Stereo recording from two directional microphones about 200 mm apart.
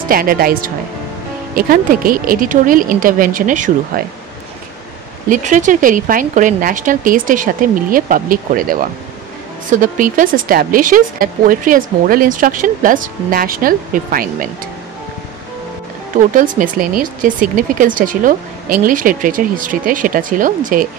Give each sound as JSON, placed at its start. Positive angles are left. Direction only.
{"t": 0.1, "sound": "a woman's voice", "side_deg": -45}
{"t": 5.3, "sound": "a woman's voice", "side_deg": -40}
{"t": 16.2, "sound": "a woman's voice", "side_deg": -40}